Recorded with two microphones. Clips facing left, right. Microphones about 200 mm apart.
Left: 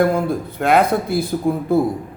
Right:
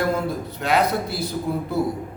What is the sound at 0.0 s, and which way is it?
A man's voice, 50° left (ahead or behind).